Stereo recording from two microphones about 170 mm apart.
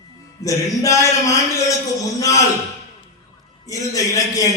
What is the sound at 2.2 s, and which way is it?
Speech, 20° left (ahead or behind).